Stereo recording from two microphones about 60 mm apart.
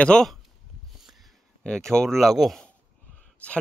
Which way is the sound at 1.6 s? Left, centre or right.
Centre.